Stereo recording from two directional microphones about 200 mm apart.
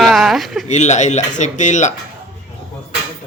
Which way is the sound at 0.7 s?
35° left (ahead or behind).